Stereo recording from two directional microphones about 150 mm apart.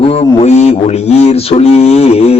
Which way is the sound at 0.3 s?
45° left (ahead or behind).